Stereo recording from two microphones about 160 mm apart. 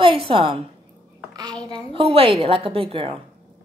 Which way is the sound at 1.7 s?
35° right (ahead or behind).